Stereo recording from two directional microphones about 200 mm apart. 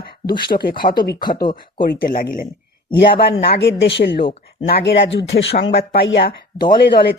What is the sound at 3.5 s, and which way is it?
Speech, 60° left (ahead or behind).